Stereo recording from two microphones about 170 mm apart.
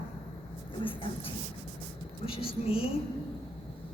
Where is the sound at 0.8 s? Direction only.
30° left (ahead or behind).